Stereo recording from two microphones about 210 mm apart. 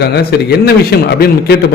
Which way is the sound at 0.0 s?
50° left (ahead or behind).